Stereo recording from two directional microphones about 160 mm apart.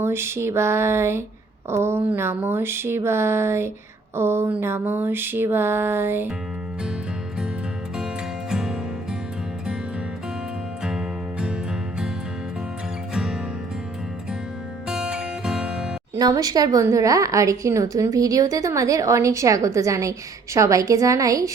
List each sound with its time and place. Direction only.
0.0 s mantra: 15° right (ahead or behind)
7.9 s music: 5° right (ahead or behind)
10.8 s music: 5° right (ahead or behind)
13.1 s music: 5° right (ahead or behind)
14.8 s music: 5° right (ahead or behind)
16.1 s speech: 20° right (ahead or behind)